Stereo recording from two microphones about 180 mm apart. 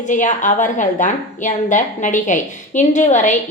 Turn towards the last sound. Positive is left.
turn(degrees=45)  # may be behind; listen again after turning